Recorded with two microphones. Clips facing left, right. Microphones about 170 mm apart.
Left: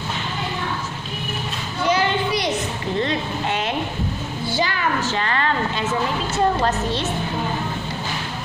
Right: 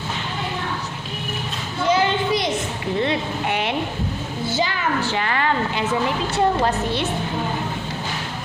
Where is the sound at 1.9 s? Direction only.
20° right (ahead or behind).